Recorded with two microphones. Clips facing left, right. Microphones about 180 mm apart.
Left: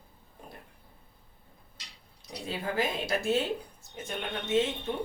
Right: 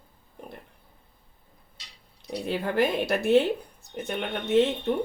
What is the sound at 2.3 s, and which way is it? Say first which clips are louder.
Speech: right 6 dB; 65° right (ahead or behind).